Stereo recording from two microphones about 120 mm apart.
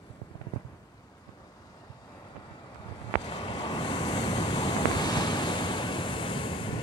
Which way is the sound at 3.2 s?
45° left (ahead or behind).